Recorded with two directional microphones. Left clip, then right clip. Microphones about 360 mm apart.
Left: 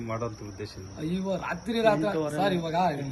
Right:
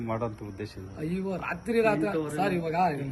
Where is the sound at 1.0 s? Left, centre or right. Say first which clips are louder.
Left 2 dB; centre.